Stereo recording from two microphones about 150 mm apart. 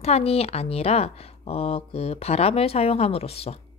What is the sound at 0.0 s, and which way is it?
Speech, 40° left (ahead or behind).